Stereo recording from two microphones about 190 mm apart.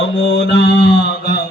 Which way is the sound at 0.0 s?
65° left (ahead or behind).